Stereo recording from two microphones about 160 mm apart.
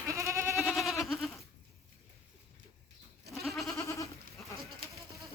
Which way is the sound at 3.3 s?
Centre (ahead or behind).